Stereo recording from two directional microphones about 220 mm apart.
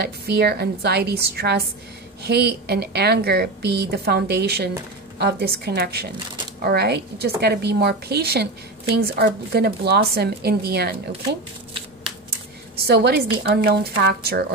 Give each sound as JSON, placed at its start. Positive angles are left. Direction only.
{"t": 0.0, "sound": "a woman's voice", "side_deg": -45}
{"t": 12.7, "sound": "a woman's voice", "side_deg": -45}